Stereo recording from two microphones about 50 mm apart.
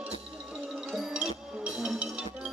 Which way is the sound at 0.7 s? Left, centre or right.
Centre.